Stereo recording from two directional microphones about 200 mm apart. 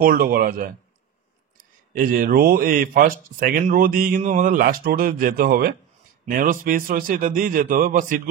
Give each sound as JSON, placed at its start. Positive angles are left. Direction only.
{"t": 0.1, "sound": "speech", "side_deg": -45}